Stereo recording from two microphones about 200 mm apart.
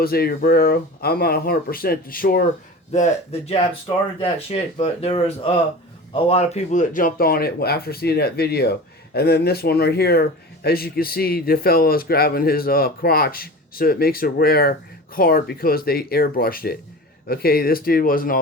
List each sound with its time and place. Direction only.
0.0 s speech: 50° left (ahead or behind)
2.9 s speech: 35° left (ahead or behind)